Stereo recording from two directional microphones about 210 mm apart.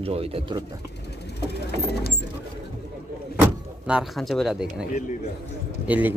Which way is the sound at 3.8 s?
5° right (ahead or behind).